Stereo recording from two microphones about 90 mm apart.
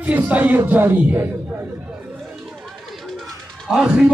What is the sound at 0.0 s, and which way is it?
A man's voice, 15° right (ahead or behind).